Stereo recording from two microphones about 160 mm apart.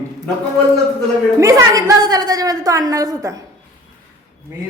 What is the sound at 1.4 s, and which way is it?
A woman's voice, 20° right (ahead or behind).